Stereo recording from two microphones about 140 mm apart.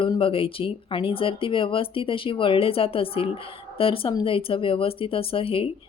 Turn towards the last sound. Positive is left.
turn(degrees=40)  # may be behind; listen again after turning